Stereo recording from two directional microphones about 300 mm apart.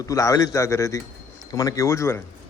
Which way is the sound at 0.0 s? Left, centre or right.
Centre.